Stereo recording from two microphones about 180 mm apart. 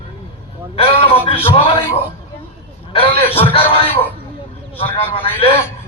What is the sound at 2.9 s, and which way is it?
A man's voice, 30° left (ahead or behind).